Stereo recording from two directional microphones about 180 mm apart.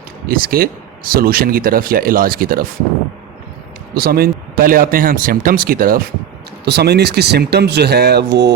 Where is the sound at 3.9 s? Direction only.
55° right (ahead or behind).